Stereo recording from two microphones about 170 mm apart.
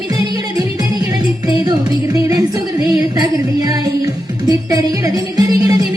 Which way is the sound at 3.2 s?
25° right (ahead or behind).